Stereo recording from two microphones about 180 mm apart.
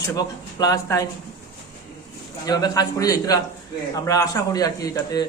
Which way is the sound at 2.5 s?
20° left (ahead or behind).